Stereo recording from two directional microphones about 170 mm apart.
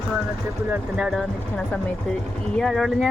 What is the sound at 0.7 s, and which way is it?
Speech, 5° right (ahead or behind).